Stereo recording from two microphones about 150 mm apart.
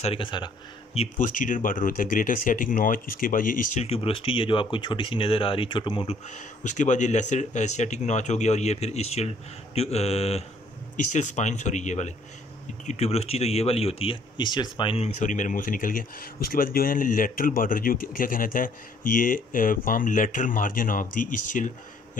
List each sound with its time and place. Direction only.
0.0 s speech: 35° left (ahead or behind)
1.1 s speech: 60° left (ahead or behind)
3.8 s speech: 40° left (ahead or behind)
6.2 s speech: 55° left (ahead or behind); by 15.0 s 35° left (ahead or behind)
15.1 s speech: 55° left (ahead or behind)